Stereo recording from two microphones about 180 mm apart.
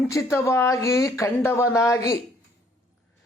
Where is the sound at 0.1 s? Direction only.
15° left (ahead or behind).